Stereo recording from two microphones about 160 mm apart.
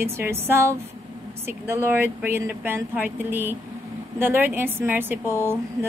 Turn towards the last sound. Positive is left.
turn(degrees=-15)  # may be behind; listen again after turning